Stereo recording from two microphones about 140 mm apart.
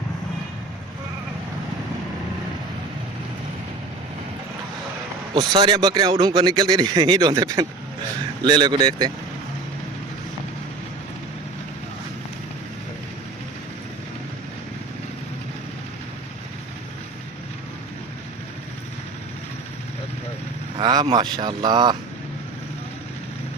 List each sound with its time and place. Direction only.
5.3 s a man's voice: 35° right (ahead or behind)
20.7 s speech: 30° right (ahead or behind)